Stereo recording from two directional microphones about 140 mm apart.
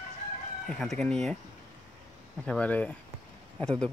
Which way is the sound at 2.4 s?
10° left (ahead or behind).